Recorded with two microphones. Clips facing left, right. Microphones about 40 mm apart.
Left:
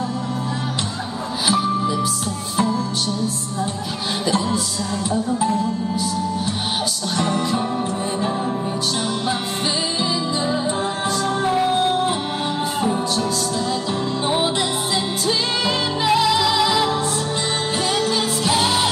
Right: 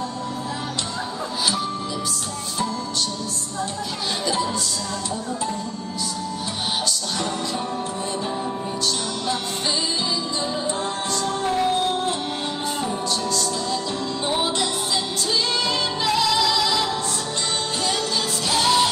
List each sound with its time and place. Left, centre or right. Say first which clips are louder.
5.1 s music: left 9 dB; centre
7.2 s music: left 9 dB; centre
11.1 s music: left 4 dB; centre
14.2 s music: left 2 dB; centre
18.5 s music: right 1 dB; centre